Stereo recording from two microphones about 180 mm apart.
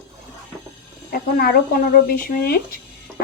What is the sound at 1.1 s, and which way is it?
A woman's voice, 55° left (ahead or behind).